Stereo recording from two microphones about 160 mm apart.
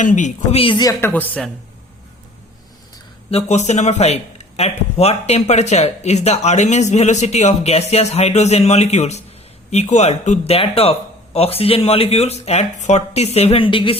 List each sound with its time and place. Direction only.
0.0 s a man's voice: 50° left (ahead or behind)
0.6 s speech: 25° left (ahead or behind)
1.1 s a man's voice: 10° left (ahead or behind)
3.2 s a man's voice: 40° left (ahead or behind)